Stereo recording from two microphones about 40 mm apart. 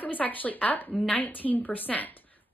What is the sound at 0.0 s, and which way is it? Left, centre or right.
A woman's voice, left.